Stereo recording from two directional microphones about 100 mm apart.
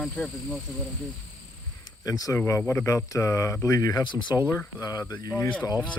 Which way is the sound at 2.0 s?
35° left (ahead or behind).